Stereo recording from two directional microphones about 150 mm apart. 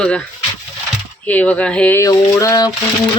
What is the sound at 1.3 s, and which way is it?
Speech, 10° left (ahead or behind).